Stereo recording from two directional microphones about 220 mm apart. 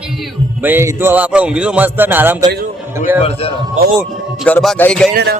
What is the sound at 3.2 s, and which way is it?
Speech, 25° left (ahead or behind).